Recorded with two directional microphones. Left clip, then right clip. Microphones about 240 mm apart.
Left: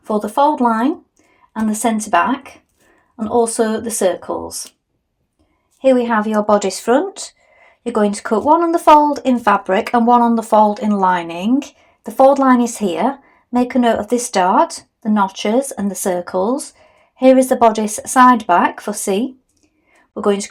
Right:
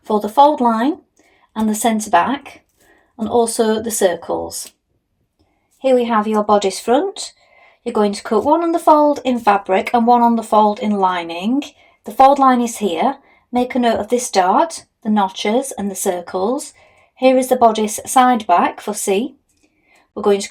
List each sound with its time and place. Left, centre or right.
0.0 s a woman's voice: centre
6.1 s speech: left
20.2 s speech: centre